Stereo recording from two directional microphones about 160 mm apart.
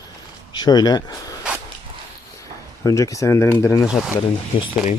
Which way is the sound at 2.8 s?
20° left (ahead or behind).